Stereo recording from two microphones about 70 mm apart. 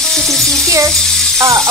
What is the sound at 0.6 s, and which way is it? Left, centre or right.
Speech, right.